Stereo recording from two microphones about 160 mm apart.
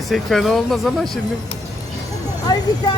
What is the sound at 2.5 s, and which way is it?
Vehicle, 25° left (ahead or behind).